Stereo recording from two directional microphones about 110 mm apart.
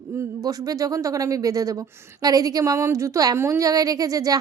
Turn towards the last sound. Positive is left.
turn(degrees=-35)  # may be behind; listen again after turning